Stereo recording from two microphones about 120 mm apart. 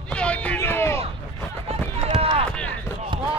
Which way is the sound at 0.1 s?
10° left (ahead or behind).